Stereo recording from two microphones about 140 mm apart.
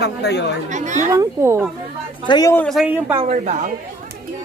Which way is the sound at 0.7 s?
60° right (ahead or behind).